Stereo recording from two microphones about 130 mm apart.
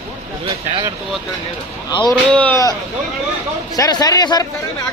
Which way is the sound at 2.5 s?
25° left (ahead or behind).